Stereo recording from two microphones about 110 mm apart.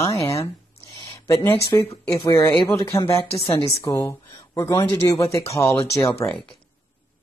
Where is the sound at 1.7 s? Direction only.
35° left (ahead or behind).